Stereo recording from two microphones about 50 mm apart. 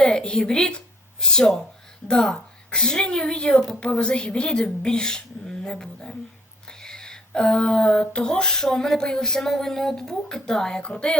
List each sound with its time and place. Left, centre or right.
0.0 s speech: centre
6.7 s a sound: centre
8.0 s speech: centre